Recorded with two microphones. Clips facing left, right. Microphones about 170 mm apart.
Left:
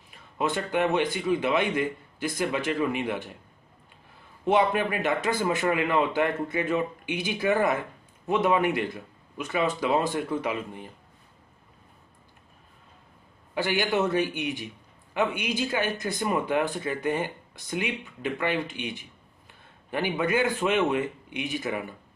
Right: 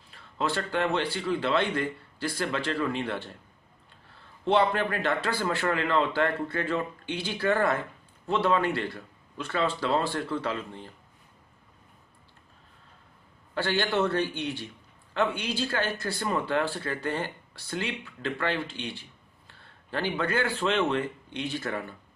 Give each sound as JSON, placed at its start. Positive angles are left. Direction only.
{"t": 0.1, "sound": "speech", "side_deg": 20}
{"t": 13.6, "sound": "a man's voice", "side_deg": 15}